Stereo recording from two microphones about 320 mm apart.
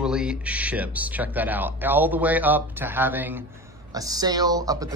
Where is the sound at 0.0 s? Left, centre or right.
Centre.